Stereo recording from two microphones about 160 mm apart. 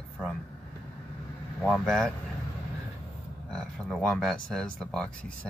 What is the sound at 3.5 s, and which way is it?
Speech, 5° left (ahead or behind).